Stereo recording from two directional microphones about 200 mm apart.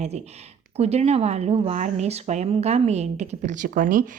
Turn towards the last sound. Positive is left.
turn(degrees=-40)  # may be behind; listen again after turning